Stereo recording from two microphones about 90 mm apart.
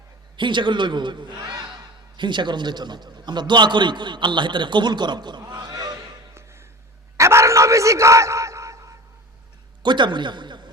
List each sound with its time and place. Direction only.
0.3 s a man's voice: 60° right (ahead or behind); by 6.1 s 45° right (ahead or behind)
6.3 s a sound: 30° right (ahead or behind)
9.8 s a man's voice: 60° right (ahead or behind)